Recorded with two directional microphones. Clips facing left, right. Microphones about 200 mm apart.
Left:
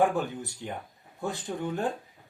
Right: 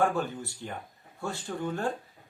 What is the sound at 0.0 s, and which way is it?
Speech, 15° left (ahead or behind).